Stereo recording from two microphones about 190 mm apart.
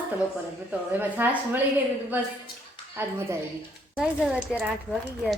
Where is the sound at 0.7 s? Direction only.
10° right (ahead or behind).